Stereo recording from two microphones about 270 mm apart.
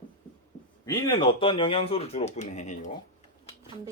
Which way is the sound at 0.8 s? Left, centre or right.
Centre.